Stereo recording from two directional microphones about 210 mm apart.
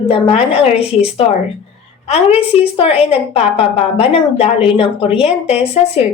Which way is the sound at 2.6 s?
30° left (ahead or behind).